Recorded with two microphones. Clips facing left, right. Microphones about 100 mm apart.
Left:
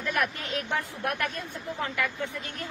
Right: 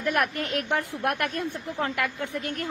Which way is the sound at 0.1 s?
60° right (ahead or behind).